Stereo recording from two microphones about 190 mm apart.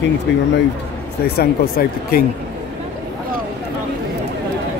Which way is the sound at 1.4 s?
50° left (ahead or behind).